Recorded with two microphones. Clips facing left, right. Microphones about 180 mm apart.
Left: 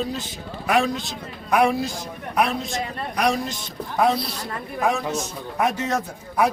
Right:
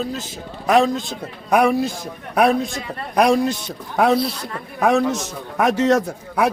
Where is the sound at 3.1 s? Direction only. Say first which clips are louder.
Right 7 dB; 55° right (ahead or behind).